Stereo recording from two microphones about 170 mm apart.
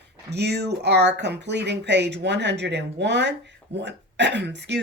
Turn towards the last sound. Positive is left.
turn(degrees=-90)